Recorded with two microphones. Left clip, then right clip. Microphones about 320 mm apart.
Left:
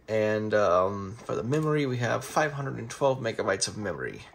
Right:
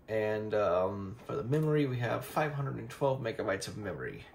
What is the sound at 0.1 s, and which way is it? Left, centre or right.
Speech, left.